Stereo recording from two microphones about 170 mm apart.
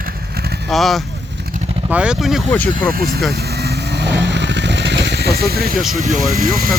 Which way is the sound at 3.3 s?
70° right (ahead or behind).